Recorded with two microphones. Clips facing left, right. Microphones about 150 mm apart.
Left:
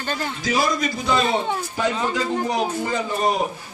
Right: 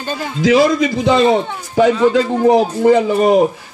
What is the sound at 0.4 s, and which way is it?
Speech, 90° right.